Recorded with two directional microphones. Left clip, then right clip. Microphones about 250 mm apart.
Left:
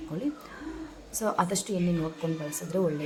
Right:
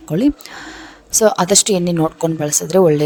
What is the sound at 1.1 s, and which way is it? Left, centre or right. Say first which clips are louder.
A woman's voice: right 15 dB; right.